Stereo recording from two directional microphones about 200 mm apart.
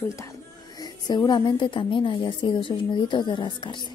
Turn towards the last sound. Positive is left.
turn(degrees=25)  # may be behind; listen again after turning